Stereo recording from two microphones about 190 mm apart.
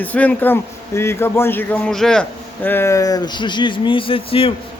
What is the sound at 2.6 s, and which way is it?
Speech, 15° left (ahead or behind).